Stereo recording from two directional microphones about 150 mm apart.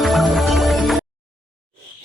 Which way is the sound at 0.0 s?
Centre (ahead or behind).